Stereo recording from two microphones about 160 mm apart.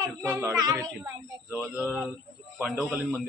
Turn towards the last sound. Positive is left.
turn(degrees=0)  # may be behind; listen again after turning